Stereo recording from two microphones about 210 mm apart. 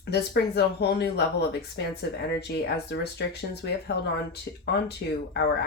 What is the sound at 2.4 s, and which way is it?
Speech, 50° left (ahead or behind).